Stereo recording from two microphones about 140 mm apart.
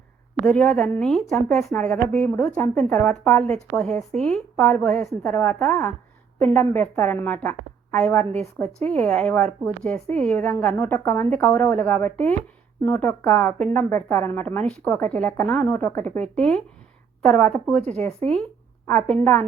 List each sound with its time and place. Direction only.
0.4 s a woman's voice: 10° left (ahead or behind)
18.9 s speech: 5° left (ahead or behind)